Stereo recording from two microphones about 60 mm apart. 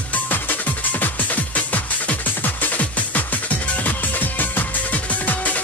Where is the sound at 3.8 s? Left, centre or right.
Left.